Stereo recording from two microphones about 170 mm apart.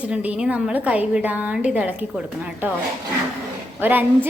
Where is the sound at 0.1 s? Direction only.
5° right (ahead or behind).